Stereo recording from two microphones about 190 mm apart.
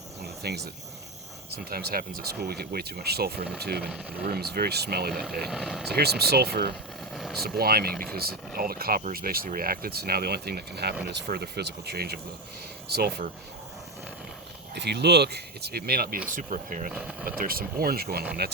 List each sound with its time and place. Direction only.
0.2 s cricket: 60° right (ahead or behind)
1.5 s speech: 55° right (ahead or behind)
5.5 s speech: 5° right (ahead or behind)
6.0 s speech: 55° right (ahead or behind)
7.1 s vehicle: centre (ahead or behind)
7.4 s speech: 55° right (ahead or behind)
14.8 s speech: 60° right (ahead or behind); by 16.9 s 45° right (ahead or behind)
16.9 s speech: 5° right (ahead or behind)
17.2 s speech: 50° right (ahead or behind)